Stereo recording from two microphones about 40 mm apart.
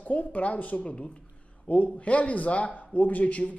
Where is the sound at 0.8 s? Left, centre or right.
Left.